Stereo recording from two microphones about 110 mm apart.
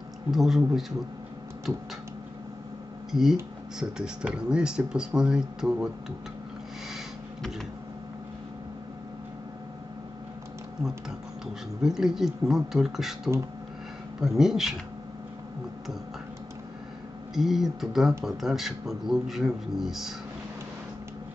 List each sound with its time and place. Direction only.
0.3 s a man's voice: centre (ahead or behind)
3.1 s speech: 5° right (ahead or behind)
11.8 s a man's voice: 5° right (ahead or behind)
17.3 s a man's voice: 5° right (ahead or behind)